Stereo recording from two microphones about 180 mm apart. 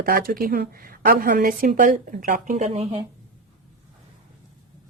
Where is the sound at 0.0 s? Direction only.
55° right (ahead or behind).